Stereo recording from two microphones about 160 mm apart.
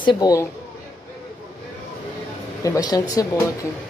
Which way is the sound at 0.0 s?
25° left (ahead or behind).